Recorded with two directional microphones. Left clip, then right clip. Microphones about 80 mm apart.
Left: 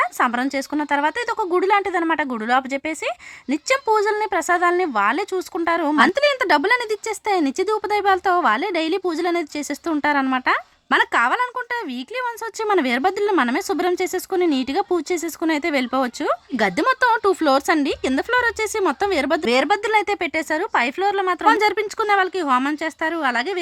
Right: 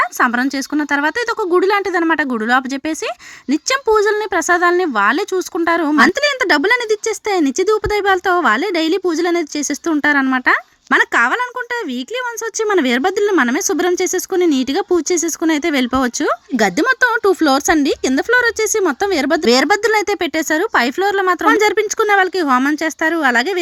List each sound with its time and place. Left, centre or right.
0.0 s speech: right
2.0 s speech: right
12.5 s speech: right
19.5 s speech: right
21.6 s speech: right